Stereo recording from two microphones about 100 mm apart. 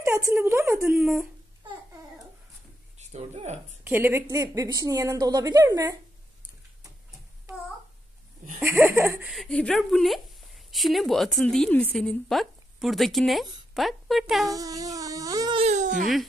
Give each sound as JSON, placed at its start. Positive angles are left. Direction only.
{"t": 0.0, "sound": "a woman's voice", "side_deg": -25}
{"t": 0.9, "sound": "laughter", "side_deg": -20}
{"t": 3.2, "sound": "speech", "side_deg": -90}
{"t": 3.8, "sound": "a woman's voice", "side_deg": -20}
{"t": 8.6, "sound": "laughter", "side_deg": -25}
{"t": 9.3, "sound": "a woman's voice", "side_deg": 0}
{"t": 14.5, "sound": "a sound", "side_deg": -35}